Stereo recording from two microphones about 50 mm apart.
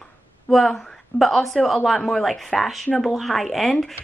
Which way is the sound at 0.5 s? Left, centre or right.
Centre.